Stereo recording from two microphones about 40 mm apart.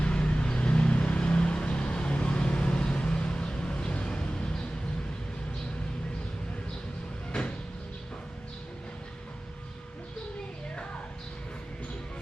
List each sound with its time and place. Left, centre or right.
0.0 s vehicle: left